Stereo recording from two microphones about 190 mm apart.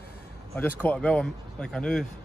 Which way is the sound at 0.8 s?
5° left (ahead or behind).